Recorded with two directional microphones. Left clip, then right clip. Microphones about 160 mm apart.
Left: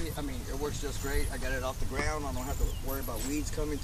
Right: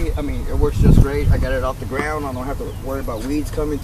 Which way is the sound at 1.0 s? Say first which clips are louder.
Right 13 dB; 20° left (ahead or behind).